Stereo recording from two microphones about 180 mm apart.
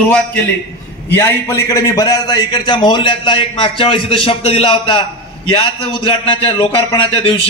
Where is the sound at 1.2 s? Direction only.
15° left (ahead or behind).